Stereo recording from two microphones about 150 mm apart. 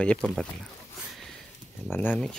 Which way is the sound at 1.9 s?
10° left (ahead or behind).